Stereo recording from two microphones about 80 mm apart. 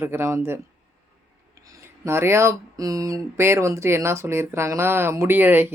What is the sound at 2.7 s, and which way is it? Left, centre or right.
Speech, right.